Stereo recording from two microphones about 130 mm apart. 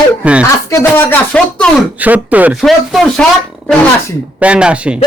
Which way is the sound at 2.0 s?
10° right (ahead or behind).